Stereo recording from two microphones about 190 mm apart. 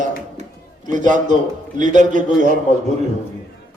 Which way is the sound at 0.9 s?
40° right (ahead or behind).